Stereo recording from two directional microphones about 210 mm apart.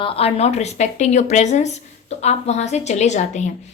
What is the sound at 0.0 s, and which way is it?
A woman's voice, 25° left (ahead or behind).